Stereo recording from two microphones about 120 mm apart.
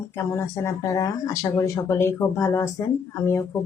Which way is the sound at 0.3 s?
25° left (ahead or behind).